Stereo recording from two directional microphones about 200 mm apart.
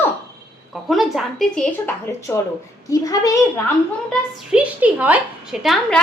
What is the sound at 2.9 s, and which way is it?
Speech, 15° left (ahead or behind).